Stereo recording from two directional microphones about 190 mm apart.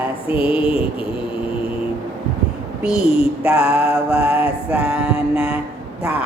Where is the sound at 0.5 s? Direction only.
30° left (ahead or behind).